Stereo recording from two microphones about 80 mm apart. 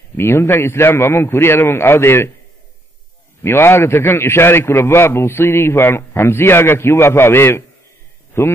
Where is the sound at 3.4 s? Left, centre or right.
Left.